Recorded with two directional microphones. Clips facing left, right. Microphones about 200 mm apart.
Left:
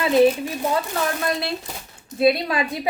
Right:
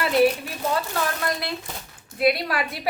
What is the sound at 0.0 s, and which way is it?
Speech, 20° left (ahead or behind).